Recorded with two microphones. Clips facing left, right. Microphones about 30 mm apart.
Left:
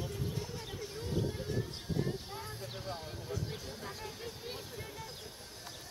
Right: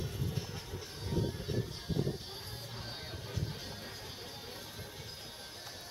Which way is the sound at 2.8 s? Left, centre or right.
Right.